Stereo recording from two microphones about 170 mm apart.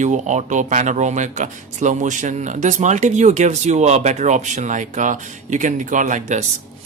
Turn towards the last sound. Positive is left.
turn(degrees=-45)  # may be behind; listen again after turning